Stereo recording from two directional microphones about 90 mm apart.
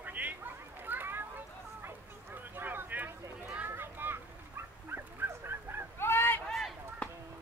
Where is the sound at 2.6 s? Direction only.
20° right (ahead or behind).